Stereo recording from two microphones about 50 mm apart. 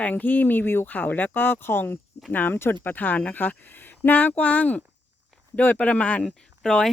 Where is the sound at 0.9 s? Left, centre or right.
Left.